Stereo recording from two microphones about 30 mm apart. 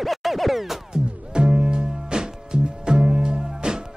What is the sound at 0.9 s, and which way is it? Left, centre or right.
Music, right.